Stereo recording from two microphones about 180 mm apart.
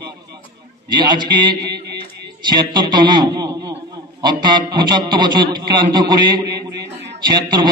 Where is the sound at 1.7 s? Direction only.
65° right (ahead or behind).